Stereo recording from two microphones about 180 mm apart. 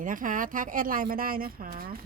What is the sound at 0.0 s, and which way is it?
Speech, 50° right (ahead or behind).